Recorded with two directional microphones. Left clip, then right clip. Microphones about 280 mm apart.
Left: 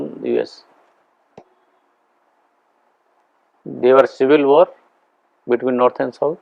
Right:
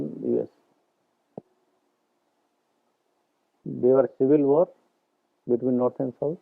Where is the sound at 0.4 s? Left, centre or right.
Centre.